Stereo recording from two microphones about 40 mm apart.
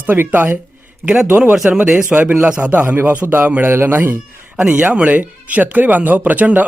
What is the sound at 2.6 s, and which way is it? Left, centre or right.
Speech, right.